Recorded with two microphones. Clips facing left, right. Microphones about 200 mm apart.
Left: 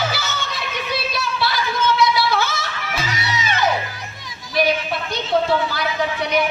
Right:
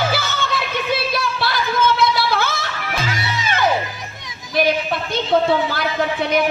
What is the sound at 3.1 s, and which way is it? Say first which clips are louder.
Music: right 1 dB; 50° right (ahead or behind).